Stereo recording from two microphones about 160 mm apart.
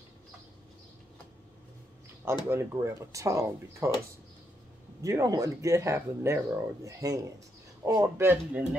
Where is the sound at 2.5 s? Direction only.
15° right (ahead or behind).